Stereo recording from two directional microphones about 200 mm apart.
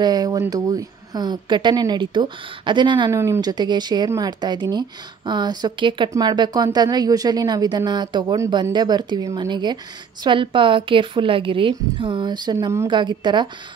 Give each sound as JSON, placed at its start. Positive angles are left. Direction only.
{"t": 0.0, "sound": "speech", "side_deg": -20}